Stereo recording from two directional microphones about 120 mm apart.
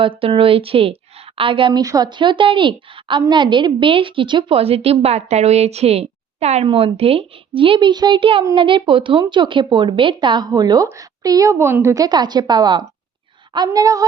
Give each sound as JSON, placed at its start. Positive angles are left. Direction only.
{"t": 0.0, "sound": "a woman's voice", "side_deg": -45}
{"t": 1.8, "sound": "a woman's voice", "side_deg": -30}
{"t": 6.7, "sound": "a woman's voice", "side_deg": -50}
{"t": 12.0, "sound": "a woman's voice", "side_deg": -35}